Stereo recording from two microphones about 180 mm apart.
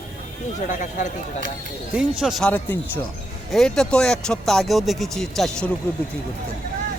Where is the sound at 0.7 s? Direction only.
45° left (ahead or behind).